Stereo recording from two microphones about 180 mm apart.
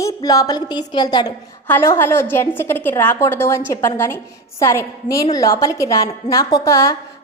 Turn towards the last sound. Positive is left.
turn(degrees=20)  # may be behind; listen again after turning